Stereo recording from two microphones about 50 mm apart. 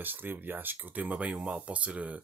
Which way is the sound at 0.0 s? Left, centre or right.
Right.